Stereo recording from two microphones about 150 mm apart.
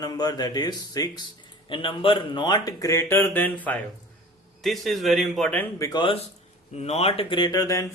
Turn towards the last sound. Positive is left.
turn(degrees=25)  # may be behind; listen again after turning